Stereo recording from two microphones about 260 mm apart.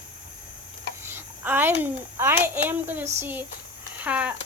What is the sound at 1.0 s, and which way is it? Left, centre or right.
A woman's voice, centre.